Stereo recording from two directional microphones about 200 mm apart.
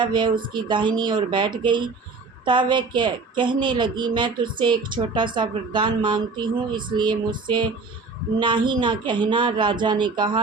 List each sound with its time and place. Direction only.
0.0 s a woman's voice: 25° right (ahead or behind)